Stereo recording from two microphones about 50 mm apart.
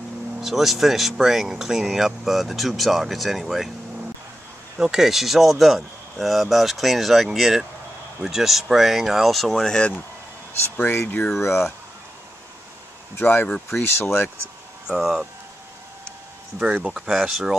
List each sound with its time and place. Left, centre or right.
0.4 s speech: centre
4.7 s speech: centre
9.5 s speech: centre
9.8 s speech: left
10.6 s speech: left
13.2 s speech: left
14.9 s speech: centre
16.5 s speech: right